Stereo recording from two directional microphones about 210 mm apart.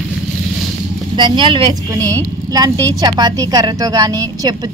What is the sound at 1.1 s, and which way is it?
A woman's voice, 20° right (ahead or behind).